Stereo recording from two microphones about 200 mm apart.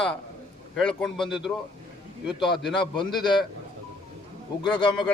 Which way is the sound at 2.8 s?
25° left (ahead or behind).